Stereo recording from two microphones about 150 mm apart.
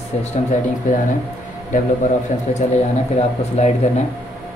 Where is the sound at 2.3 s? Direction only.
60° left (ahead or behind).